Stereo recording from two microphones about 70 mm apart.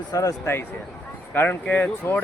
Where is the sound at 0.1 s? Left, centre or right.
Left.